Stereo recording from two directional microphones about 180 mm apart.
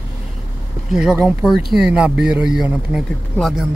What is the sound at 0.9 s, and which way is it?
Speech, 5° right (ahead or behind).